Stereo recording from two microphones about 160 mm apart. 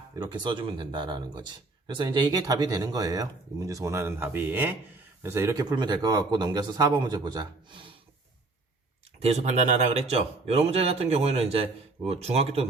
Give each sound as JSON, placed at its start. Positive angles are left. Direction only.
{"t": 0.2, "sound": "speech", "side_deg": -30}
{"t": 9.1, "sound": "speech", "side_deg": -40}